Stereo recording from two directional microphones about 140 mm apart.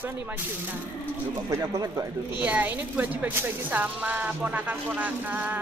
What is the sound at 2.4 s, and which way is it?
Speech, 10° right (ahead or behind).